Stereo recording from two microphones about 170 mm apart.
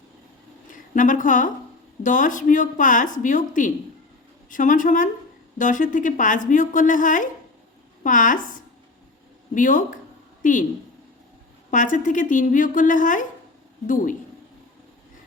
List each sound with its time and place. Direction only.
0.7 s a woman's voice: 50° left (ahead or behind)
9.6 s a woman's voice: 50° left (ahead or behind)
11.7 s a woman's voice: 50° left (ahead or behind)